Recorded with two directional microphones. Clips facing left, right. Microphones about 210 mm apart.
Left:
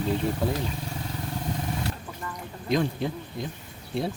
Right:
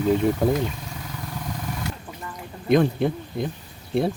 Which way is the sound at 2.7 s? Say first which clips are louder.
Right 7 dB; 60° right (ahead or behind).